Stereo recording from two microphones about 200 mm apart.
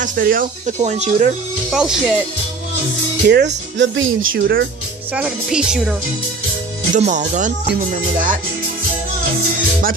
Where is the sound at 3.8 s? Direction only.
70° right (ahead or behind).